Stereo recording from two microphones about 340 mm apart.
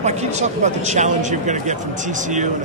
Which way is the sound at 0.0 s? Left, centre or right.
Centre.